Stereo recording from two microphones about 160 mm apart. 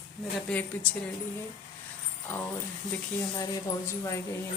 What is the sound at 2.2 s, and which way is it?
Speech, 15° left (ahead or behind).